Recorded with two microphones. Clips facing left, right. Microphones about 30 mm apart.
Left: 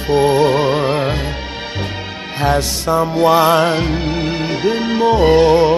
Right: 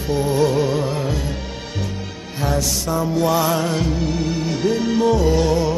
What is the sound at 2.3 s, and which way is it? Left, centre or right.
Music, left.